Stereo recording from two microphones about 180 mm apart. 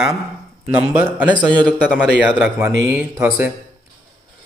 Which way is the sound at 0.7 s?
10° right (ahead or behind).